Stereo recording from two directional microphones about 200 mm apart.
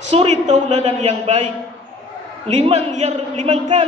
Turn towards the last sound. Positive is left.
turn(degrees=-30)  # may be behind; listen again after turning